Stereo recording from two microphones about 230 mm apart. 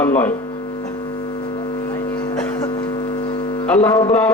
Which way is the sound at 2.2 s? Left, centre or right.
Centre.